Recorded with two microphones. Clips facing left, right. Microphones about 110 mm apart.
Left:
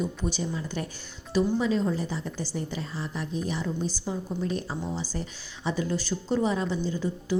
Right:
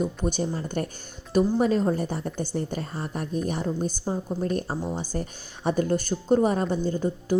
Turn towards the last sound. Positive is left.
turn(degrees=-50)  # may be behind; listen again after turning